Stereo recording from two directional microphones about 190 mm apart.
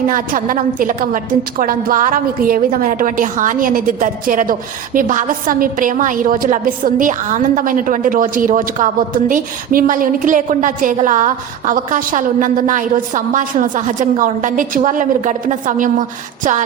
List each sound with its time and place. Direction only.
0.1 s a woman's voice: 45° right (ahead or behind)